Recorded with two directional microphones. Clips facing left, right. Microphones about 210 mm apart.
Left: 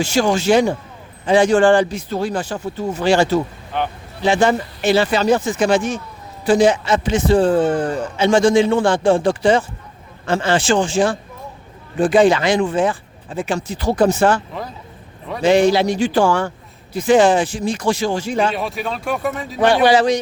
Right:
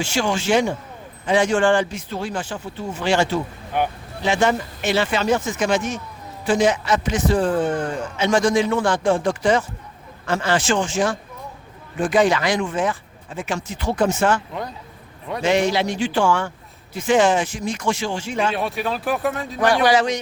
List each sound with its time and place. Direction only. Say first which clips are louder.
0.0 s speech: left 5 dB; 40° left (ahead or behind)
3.7 s speech: even; 10° right (ahead or behind)
4.2 s a man's voice: left 4 dB; 35° left (ahead or behind)
18.5 s speech: even; centre (ahead or behind)
19.5 s a man's voice: left 4 dB; 30° left (ahead or behind)